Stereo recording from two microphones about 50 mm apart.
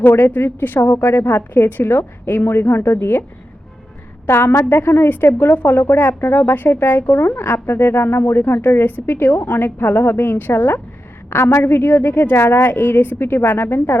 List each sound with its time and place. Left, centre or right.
0.0 s a woman's voice: left
4.3 s a woman's voice: left
11.3 s a woman's voice: left